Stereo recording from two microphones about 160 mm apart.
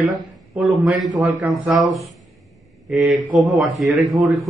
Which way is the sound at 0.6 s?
Centre (ahead or behind).